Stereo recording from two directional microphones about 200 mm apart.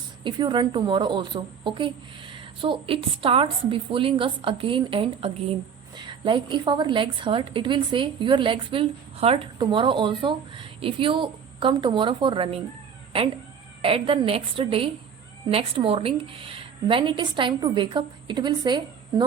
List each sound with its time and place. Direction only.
0.3 s a woman's voice: 20° right (ahead or behind)